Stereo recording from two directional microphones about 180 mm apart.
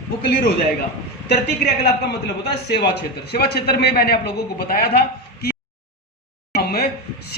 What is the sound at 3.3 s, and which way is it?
A man's voice, 60° left (ahead or behind).